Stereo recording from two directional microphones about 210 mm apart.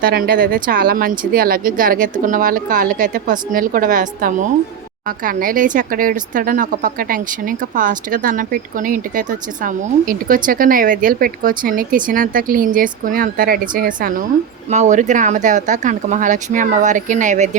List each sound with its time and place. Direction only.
0.0 s speech: 45° right (ahead or behind)